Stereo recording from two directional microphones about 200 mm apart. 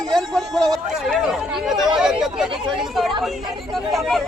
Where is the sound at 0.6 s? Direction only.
Centre (ahead or behind).